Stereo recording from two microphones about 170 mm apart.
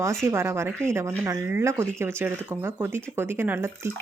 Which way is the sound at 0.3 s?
15° right (ahead or behind).